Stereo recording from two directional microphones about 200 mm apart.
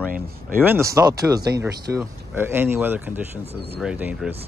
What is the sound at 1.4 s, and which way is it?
Speech, 55° right (ahead or behind).